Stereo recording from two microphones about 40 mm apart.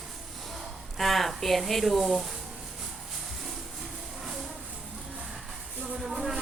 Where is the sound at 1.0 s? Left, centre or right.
Centre.